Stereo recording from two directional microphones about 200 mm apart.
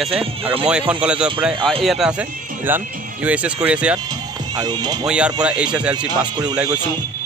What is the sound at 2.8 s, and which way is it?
Music, 45° right (ahead or behind).